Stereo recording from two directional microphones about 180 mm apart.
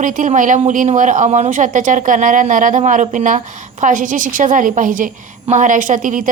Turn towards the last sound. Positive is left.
turn(degrees=-45)  # may be behind; listen again after turning